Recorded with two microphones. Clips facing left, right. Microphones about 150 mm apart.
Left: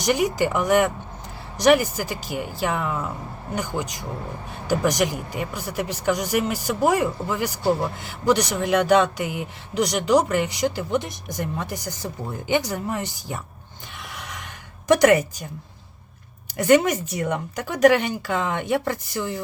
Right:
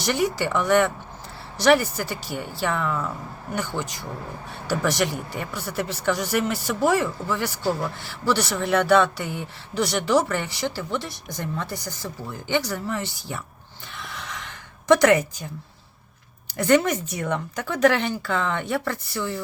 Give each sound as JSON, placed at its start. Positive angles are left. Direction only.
{"t": 0.0, "sound": "speech", "side_deg": 15}
{"t": 13.1, "sound": "speech", "side_deg": -70}
{"t": 13.9, "sound": "a sound", "side_deg": 10}
{"t": 16.6, "sound": "speech", "side_deg": 15}